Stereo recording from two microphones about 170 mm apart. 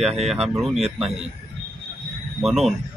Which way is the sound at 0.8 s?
35° right (ahead or behind).